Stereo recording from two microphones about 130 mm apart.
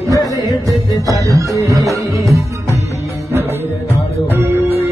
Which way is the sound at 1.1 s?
25° right (ahead or behind).